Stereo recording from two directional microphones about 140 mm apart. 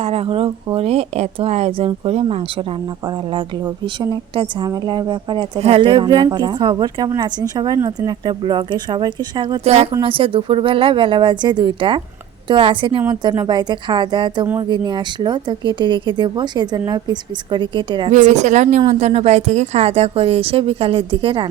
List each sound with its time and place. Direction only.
0.0 s speech: 45° right (ahead or behind)
9.6 s speech: 50° right (ahead or behind)
18.1 s a woman's voice: 60° right (ahead or behind); by 21.4 s 35° right (ahead or behind)